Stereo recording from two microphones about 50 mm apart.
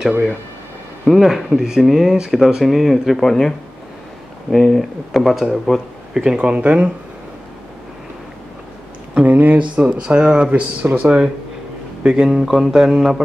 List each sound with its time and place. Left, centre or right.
1.1 s speech: centre; by 6.9 s right
9.1 s speech: right
10.8 s speech: right
12.0 s speech: centre